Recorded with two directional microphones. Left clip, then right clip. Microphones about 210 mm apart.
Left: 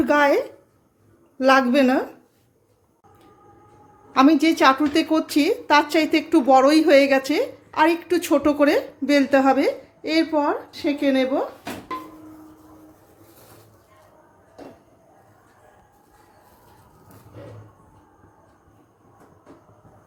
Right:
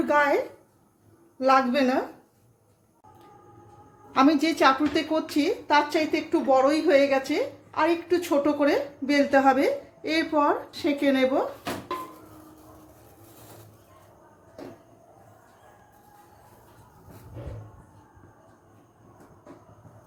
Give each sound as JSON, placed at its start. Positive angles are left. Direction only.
{"t": 0.0, "sound": "a woman's voice", "side_deg": 30}
{"t": 1.4, "sound": "a woman's voice", "side_deg": 35}
{"t": 4.1, "sound": "a woman's voice", "side_deg": 20}